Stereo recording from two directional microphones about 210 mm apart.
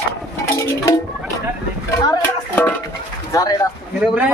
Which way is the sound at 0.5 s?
15° left (ahead or behind).